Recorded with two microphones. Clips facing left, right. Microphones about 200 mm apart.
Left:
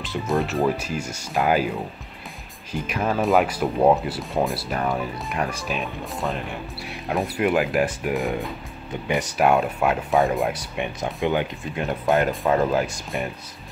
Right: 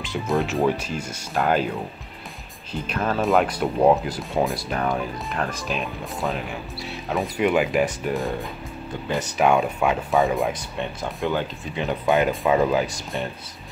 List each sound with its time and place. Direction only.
0.0 s speech: centre (ahead or behind); by 11.4 s 15° left (ahead or behind)
11.7 s speech: centre (ahead or behind)